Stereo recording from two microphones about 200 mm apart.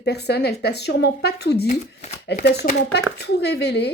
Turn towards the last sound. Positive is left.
turn(degrees=55)  # may be behind; listen again after turning